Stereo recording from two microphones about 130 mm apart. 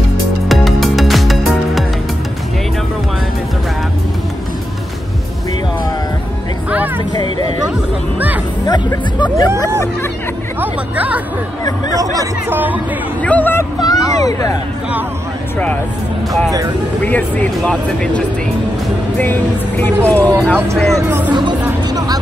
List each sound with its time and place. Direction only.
0.5 s music: centre (ahead or behind)
7.2 s music: 30° left (ahead or behind)
8.6 s music: 30° left (ahead or behind)
10.6 s chatter: 10° right (ahead or behind)
12.0 s music: 30° right (ahead or behind)
12.4 s music: 15° right (ahead or behind)
13.2 s a sound: 10° left (ahead or behind)
13.7 s a sound: 30° left (ahead or behind)
17.0 s speech: 10° left (ahead or behind)
19.8 s speech: 10° left (ahead or behind)
21.3 s music: 35° right (ahead or behind)